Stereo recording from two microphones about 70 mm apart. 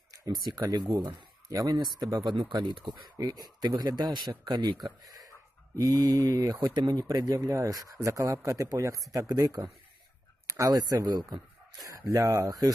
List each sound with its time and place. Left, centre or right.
0.1 s speech: right
3.8 s speech: right
6.7 s speech: right
7.1 s speech: right
9.3 s speech: right
10.4 s a sound: right
10.8 s speech: right